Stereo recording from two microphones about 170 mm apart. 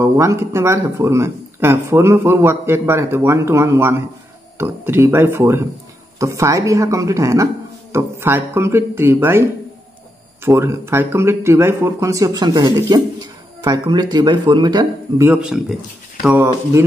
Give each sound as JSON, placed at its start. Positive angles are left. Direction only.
{"t": 0.0, "sound": "speech", "side_deg": -15}
{"t": 10.4, "sound": "speech", "side_deg": -15}
{"t": 15.4, "sound": "speech", "side_deg": -5}